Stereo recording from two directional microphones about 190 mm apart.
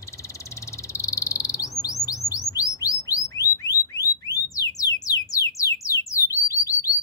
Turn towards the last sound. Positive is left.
turn(degrees=15)  # may be behind; listen again after turning